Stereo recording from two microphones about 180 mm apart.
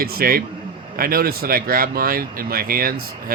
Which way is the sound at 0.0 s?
55° right (ahead or behind).